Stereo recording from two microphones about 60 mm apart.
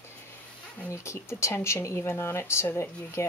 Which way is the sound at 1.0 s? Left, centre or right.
Left.